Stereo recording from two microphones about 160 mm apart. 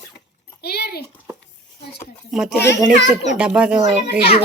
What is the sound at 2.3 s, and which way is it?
Speech, centre (ahead or behind).